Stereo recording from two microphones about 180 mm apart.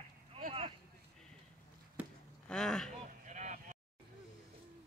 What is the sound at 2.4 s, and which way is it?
Speech, 5° left (ahead or behind).